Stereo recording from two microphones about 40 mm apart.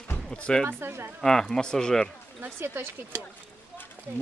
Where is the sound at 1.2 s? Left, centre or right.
Centre.